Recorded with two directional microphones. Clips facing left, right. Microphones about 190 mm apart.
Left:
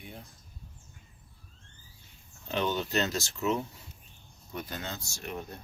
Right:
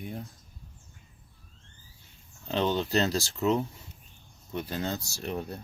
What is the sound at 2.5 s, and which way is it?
Speech, 30° right (ahead or behind).